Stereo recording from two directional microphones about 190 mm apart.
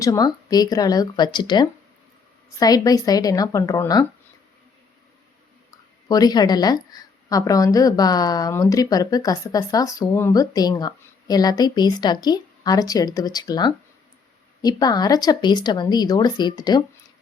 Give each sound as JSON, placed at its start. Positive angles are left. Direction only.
{"t": 0.0, "sound": "a woman's voice", "side_deg": 20}
{"t": 6.1, "sound": "a woman's voice", "side_deg": 20}